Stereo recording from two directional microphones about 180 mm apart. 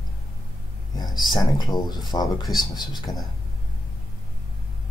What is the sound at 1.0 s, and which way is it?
Speech, 25° left (ahead or behind).